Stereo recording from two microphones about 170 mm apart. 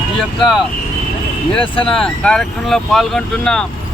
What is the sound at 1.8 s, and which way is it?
Speech, 5° left (ahead or behind).